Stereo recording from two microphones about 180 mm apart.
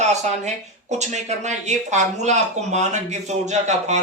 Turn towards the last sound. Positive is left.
turn(degrees=-40)  # may be behind; listen again after turning